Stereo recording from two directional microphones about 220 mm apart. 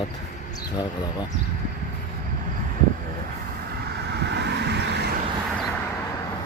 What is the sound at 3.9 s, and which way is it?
Vehicle, 50° right (ahead or behind).